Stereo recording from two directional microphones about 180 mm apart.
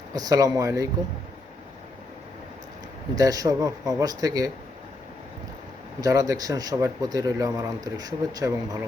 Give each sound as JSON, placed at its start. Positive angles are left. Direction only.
{"t": 0.1, "sound": "speech", "side_deg": -20}
{"t": 3.2, "sound": "speech", "side_deg": -20}
{"t": 6.0, "sound": "speech", "side_deg": -20}